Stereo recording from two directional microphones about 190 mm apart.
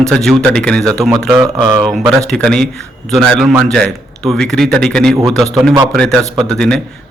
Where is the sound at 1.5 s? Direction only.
20° right (ahead or behind).